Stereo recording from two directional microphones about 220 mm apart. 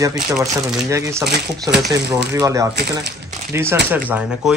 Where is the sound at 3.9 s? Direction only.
5° right (ahead or behind).